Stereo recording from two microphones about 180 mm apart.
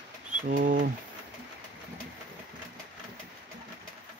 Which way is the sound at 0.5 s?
45° right (ahead or behind).